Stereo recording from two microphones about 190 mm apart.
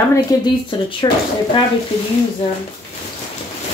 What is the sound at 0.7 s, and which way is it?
Speech, 25° left (ahead or behind).